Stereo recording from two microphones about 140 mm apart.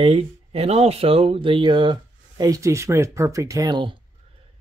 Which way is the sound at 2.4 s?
25° right (ahead or behind).